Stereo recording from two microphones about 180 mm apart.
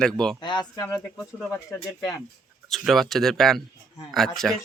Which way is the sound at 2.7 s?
Centre (ahead or behind).